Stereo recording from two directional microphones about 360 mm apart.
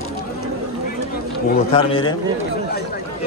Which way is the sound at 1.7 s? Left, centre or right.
Centre.